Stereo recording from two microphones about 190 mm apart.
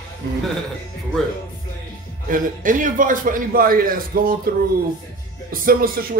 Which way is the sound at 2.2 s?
45° right (ahead or behind).